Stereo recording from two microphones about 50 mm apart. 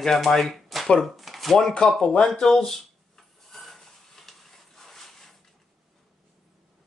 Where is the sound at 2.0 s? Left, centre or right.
Centre.